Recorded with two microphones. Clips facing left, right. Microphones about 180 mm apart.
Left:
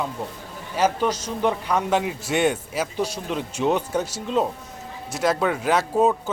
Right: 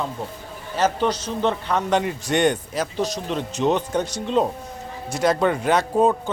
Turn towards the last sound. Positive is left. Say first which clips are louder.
# right 1 dB
turn(degrees=5)  # may be behind; listen again after turning